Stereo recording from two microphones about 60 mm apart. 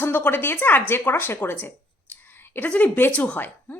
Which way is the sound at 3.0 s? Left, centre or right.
Left.